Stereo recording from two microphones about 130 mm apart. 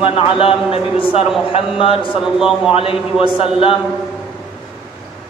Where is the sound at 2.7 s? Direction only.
45° left (ahead or behind).